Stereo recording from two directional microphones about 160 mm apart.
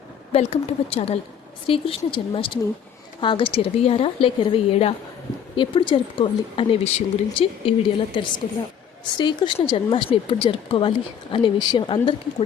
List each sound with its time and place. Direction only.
0.3 s speech: 40° left (ahead or behind)